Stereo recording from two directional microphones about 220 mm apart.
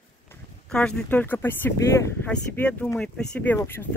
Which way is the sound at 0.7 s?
5° left (ahead or behind).